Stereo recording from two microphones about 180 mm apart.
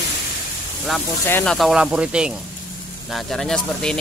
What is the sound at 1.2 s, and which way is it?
Speech, 10° left (ahead or behind).